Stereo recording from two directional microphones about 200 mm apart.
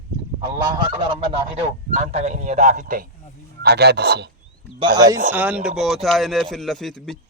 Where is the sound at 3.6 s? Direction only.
55° right (ahead or behind).